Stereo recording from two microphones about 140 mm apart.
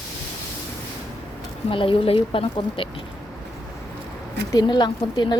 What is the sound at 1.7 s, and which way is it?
Speech, 40° left (ahead or behind).